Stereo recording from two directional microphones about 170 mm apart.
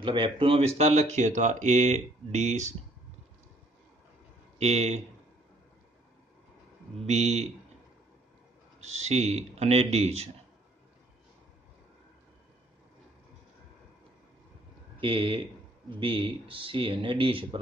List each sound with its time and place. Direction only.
0.0 s speech: 30° right (ahead or behind)
4.6 s speech: 40° right (ahead or behind)
7.0 s speech: 40° right (ahead or behind)
8.8 s speech: 40° right (ahead or behind)
15.0 s speech: 30° right (ahead or behind)